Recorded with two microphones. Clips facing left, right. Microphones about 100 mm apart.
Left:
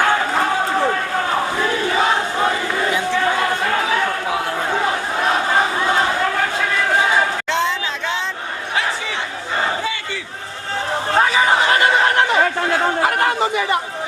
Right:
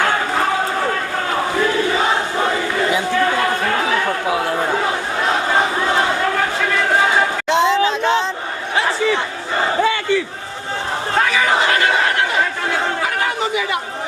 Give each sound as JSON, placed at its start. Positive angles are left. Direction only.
{"t": 7.5, "sound": "a sound", "side_deg": -20}
{"t": 11.2, "sound": "chatter", "side_deg": 25}
{"t": 13.1, "sound": "chatter", "side_deg": 50}